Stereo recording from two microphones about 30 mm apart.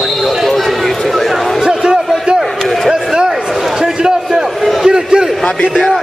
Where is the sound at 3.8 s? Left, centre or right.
Right.